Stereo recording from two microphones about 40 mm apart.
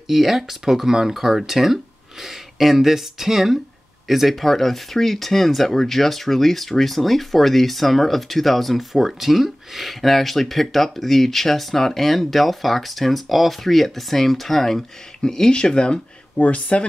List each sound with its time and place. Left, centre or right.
0.1 s speech: centre; by 16.0 s left
16.3 s speech: left